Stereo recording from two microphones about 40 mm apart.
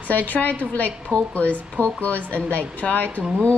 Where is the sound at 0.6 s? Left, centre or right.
Left.